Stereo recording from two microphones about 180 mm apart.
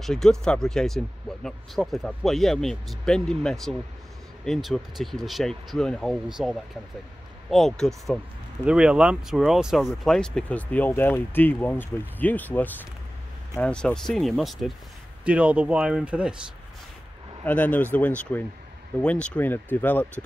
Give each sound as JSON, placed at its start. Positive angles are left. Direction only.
{"t": 0.0, "sound": "speech", "side_deg": 5}
{"t": 17.5, "sound": "speech", "side_deg": 10}